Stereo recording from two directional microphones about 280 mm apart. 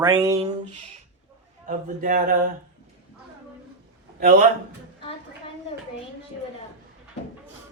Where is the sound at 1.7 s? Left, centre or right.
Right.